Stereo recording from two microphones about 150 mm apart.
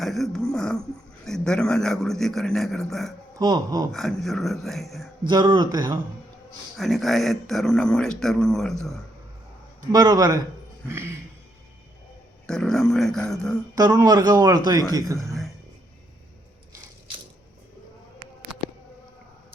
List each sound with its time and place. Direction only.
0.0 s a sound: centre (ahead or behind)
1.2 s speech: 5° left (ahead or behind)
3.3 s speech: 25° right (ahead or behind)
3.9 s speech: centre (ahead or behind)
5.2 s speech: 30° right (ahead or behind)
6.7 s speech: centre (ahead or behind)
9.9 s speech: 25° right (ahead or behind)
10.8 s a sound: 15° right (ahead or behind)
12.5 s speech: 5° left (ahead or behind)
13.7 s speech: 25° right (ahead or behind)